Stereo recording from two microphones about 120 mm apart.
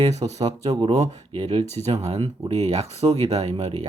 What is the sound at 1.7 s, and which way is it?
Speech, 65° right (ahead or behind).